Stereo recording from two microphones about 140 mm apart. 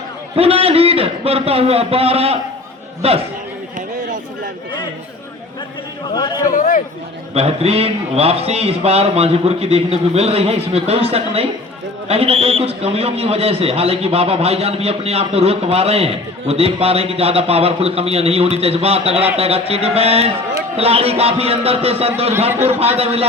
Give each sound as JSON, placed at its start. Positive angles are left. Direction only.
{"t": 0.3, "sound": "a man's voice", "side_deg": -45}
{"t": 6.5, "sound": "a man's voice", "side_deg": 70}
{"t": 7.3, "sound": "a man's voice", "side_deg": -45}